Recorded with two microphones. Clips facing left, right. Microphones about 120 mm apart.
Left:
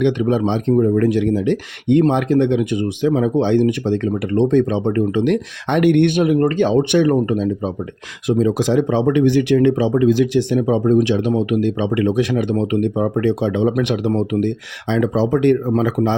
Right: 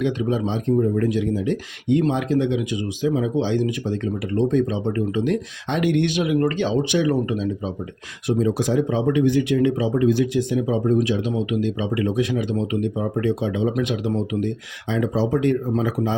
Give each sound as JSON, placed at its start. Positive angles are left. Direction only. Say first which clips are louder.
{"t": 0.0, "sound": "speech", "louder": "left 6 dB", "side_deg": 70}
{"t": 6.7, "sound": "speech", "louder": "left 6 dB", "side_deg": 60}
{"t": 8.3, "sound": "speech", "louder": "left 4 dB", "side_deg": 90}